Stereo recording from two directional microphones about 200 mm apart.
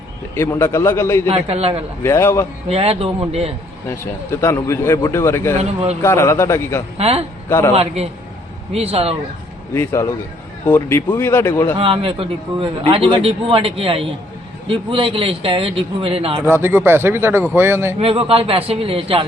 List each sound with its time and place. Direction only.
0.3 s speech: 15° left (ahead or behind)
1.3 s a man's voice: 30° right (ahead or behind)
2.0 s speech: 15° left (ahead or behind)
2.6 s a man's voice: 30° right (ahead or behind)
3.8 s speech: 15° left (ahead or behind)
5.6 s a man's voice: 30° right (ahead or behind)
6.0 s speech: 15° left (ahead or behind)
6.9 s a man's voice: 30° right (ahead or behind)
8.7 s a man's voice: 30° right (ahead or behind)
9.7 s speech: 15° left (ahead or behind)
11.8 s a man's voice: 25° right (ahead or behind)
16.4 s speech: 10° right (ahead or behind)
18.0 s a man's voice: 30° right (ahead or behind)